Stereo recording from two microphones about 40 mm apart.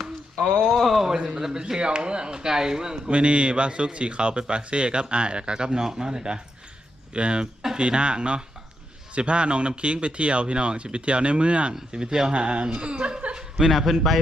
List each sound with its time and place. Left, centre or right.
0.6 s speech: centre
3.1 s a man's voice: right
12.3 s a man's voice: right
13.6 s speech: centre